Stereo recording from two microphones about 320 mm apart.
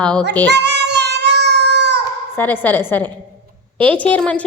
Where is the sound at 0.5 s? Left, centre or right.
Right.